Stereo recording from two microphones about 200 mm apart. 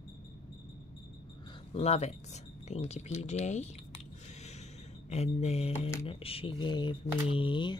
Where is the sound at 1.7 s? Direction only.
30° left (ahead or behind).